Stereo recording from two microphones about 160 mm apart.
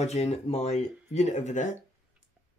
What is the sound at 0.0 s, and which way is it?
Speech, 45° left (ahead or behind).